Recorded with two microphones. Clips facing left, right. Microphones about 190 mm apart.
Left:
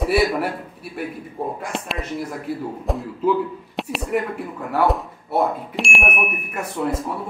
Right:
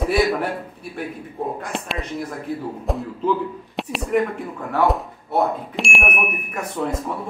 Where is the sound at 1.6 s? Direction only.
5° left (ahead or behind).